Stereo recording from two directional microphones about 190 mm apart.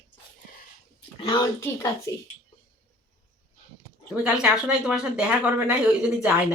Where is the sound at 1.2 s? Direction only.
20° left (ahead or behind).